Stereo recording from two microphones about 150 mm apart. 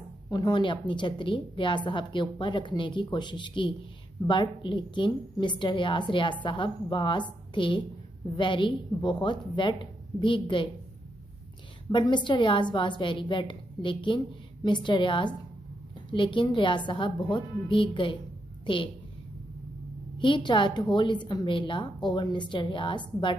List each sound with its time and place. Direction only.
0.3 s a woman's voice: 30° left (ahead or behind)
11.9 s a woman's voice: 30° left (ahead or behind)
20.2 s a woman's voice: 30° left (ahead or behind)